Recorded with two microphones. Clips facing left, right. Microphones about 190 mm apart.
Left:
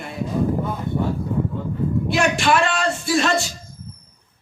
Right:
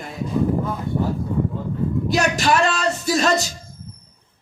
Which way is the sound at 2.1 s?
40° right (ahead or behind).